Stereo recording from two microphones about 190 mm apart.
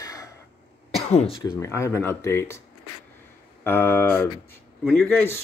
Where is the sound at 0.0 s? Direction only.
20° left (ahead or behind).